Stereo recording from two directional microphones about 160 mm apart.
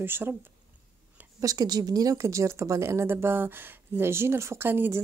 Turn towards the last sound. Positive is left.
turn(degrees=-15)  # may be behind; listen again after turning